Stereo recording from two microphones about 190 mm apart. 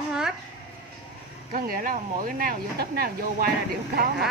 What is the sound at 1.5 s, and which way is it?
A woman's voice, 50° right (ahead or behind).